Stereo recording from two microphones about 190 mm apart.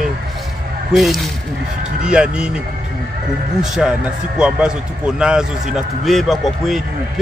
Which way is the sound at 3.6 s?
5° right (ahead or behind).